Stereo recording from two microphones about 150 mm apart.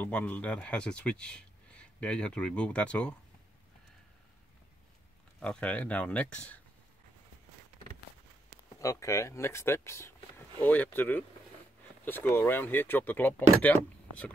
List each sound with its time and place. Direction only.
0.0 s speech: 10° left (ahead or behind)
5.4 s speech: 10° left (ahead or behind)
8.7 s speech: 20° left (ahead or behind)